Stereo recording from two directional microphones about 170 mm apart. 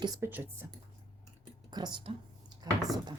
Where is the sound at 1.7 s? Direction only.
25° right (ahead or behind).